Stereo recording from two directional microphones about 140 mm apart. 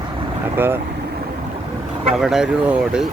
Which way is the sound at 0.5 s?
15° right (ahead or behind).